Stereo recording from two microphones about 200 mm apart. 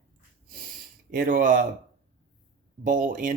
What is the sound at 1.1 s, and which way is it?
Speech, 40° right (ahead or behind).